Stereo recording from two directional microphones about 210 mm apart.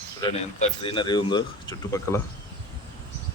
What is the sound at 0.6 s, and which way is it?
Speech, 25° left (ahead or behind).